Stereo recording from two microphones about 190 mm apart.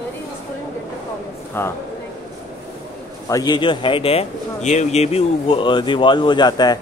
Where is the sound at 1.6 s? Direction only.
10° left (ahead or behind).